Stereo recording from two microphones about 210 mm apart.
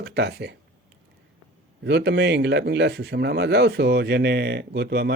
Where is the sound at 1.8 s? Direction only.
55° right (ahead or behind).